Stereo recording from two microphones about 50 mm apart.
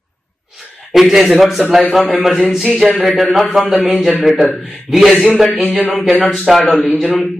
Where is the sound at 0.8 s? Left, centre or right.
Centre.